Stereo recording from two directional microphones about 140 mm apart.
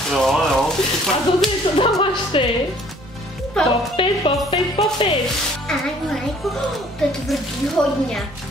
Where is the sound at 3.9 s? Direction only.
40° left (ahead or behind).